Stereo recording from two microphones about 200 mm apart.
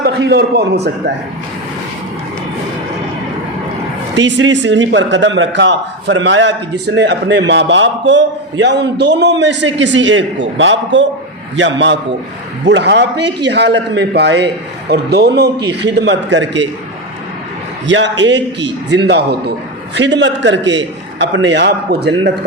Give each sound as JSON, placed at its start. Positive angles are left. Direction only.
{"t": 0.0, "sound": "a man's voice", "side_deg": -55}
{"t": 4.1, "sound": "a man's voice", "side_deg": -65}
{"t": 17.8, "sound": "a man's voice", "side_deg": -65}